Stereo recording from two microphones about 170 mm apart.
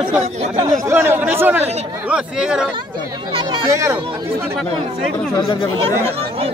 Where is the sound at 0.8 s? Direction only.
15° right (ahead or behind).